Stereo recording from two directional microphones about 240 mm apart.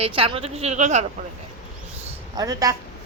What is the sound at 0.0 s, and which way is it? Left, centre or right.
Speech, right.